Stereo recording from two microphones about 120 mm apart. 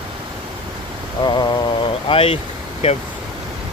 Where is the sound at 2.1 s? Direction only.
50° left (ahead or behind).